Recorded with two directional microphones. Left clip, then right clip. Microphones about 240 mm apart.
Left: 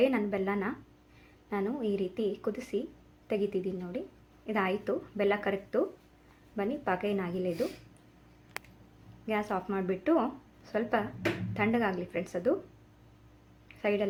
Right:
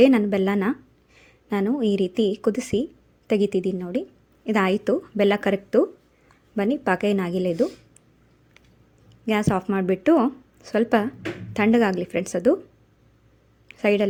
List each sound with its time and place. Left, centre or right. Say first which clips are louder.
0.0 s a woman's voice: right 11 dB; right
9.2 s a woman's voice: right 9 dB; right
13.7 s a sound: right 9 dB; right